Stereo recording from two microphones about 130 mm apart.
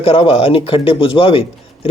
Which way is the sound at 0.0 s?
45° left (ahead or behind).